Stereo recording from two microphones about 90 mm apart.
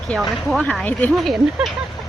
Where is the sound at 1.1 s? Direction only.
Centre (ahead or behind).